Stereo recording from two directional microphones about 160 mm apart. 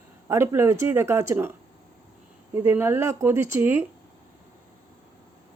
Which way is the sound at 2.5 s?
15° right (ahead or behind).